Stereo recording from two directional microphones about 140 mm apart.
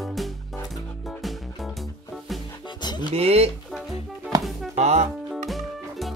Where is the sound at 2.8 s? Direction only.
30° left (ahead or behind).